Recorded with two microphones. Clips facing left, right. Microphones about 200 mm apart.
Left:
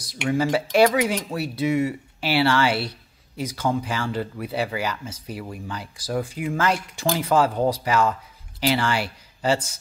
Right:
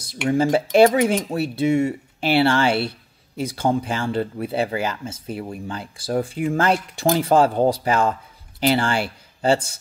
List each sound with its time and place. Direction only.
0.3 s speech: 25° right (ahead or behind)